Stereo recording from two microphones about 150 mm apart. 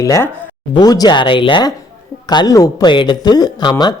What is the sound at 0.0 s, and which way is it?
A man's voice, 20° left (ahead or behind).